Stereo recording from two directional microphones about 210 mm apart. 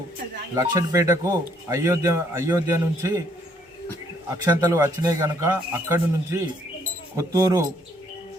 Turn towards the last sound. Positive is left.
turn(degrees=-15)  # may be behind; listen again after turning